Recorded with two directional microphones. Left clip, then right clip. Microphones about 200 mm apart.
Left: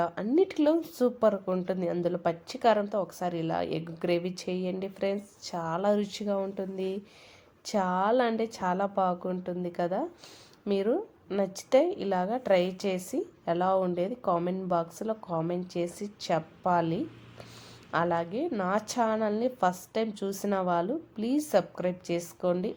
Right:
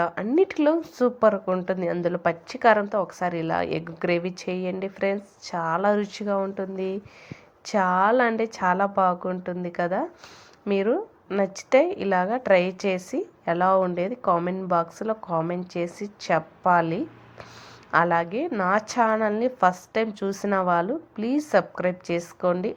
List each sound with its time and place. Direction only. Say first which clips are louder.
0.0 s a woman's voice: right 4 dB; centre (ahead or behind)